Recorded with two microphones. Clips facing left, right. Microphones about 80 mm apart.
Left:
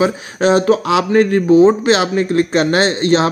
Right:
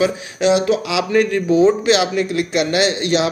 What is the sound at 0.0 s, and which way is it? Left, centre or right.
Speech, left.